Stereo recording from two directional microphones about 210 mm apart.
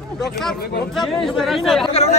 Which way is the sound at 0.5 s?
50° left (ahead or behind).